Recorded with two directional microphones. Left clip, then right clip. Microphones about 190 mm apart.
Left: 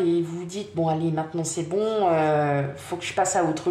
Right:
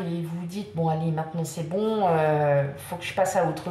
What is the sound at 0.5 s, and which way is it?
Speech, 40° left (ahead or behind).